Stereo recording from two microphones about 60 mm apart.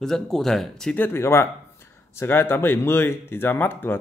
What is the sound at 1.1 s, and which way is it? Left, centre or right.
Speech, left.